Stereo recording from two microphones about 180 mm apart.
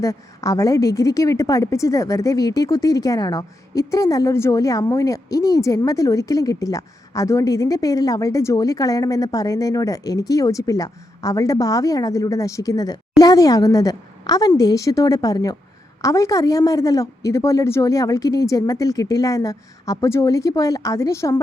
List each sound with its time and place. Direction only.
0.0 s a woman's voice: 15° left (ahead or behind)